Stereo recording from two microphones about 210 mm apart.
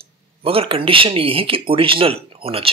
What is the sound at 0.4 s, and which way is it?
Speech, 25° right (ahead or behind).